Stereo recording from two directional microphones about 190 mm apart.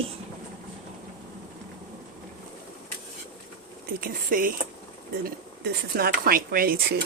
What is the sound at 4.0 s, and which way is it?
Speech, 45° right (ahead or behind).